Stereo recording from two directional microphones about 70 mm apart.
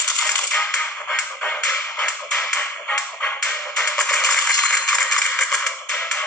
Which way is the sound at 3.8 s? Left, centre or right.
Centre.